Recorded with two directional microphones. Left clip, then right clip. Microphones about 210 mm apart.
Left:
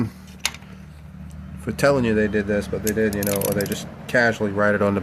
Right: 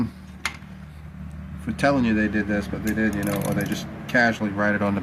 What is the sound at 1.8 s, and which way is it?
Speech, 55° left (ahead or behind).